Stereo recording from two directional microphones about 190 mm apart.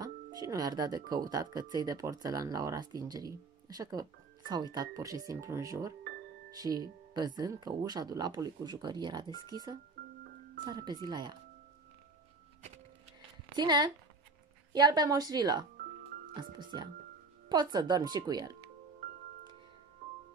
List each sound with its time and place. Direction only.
0.0 s speech: 20° right (ahead or behind)
13.6 s speech: 20° right (ahead or behind)